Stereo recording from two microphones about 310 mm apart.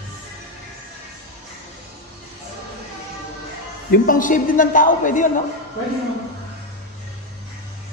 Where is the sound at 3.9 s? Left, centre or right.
Left.